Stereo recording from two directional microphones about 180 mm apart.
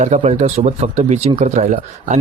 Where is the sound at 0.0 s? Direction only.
40° right (ahead or behind).